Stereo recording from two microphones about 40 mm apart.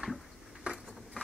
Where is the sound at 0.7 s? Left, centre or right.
Right.